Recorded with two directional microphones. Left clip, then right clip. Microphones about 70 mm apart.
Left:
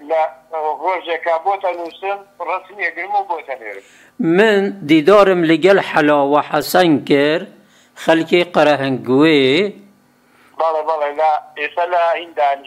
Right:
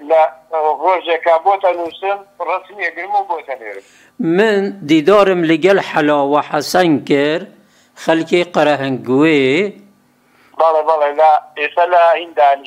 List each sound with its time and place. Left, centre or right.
0.0 s speech: right
3.7 s speech: centre
10.5 s a man's voice: right